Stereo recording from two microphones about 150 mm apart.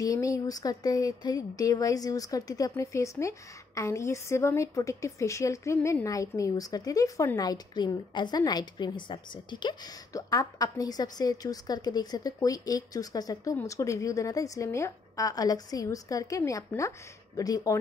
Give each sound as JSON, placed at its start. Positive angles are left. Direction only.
{"t": 0.0, "sound": "a woman's voice", "side_deg": 20}